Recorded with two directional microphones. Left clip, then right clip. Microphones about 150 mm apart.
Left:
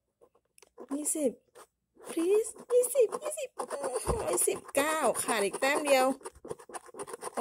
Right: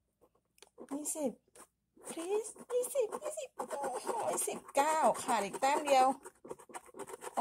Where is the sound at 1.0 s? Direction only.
45° left (ahead or behind).